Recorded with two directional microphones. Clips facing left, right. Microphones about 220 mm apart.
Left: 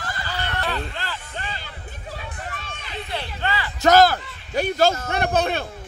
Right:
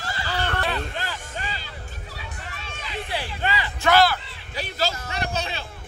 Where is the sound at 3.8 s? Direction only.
40° left (ahead or behind).